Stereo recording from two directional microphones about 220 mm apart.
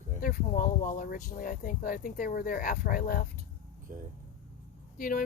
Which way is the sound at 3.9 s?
35° right (ahead or behind).